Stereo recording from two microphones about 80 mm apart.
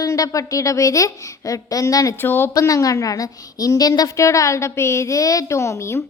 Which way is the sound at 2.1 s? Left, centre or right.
Left.